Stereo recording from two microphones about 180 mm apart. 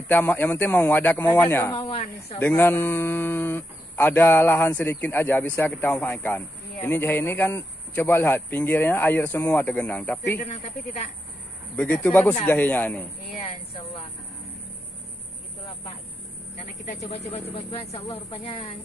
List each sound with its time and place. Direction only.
0.1 s speech: 10° left (ahead or behind)
1.8 s speech: 35° left (ahead or behind)
2.3 s speech: 10° left (ahead or behind)
11.7 s speech: 10° left (ahead or behind)
17.0 s speech: 35° left (ahead or behind)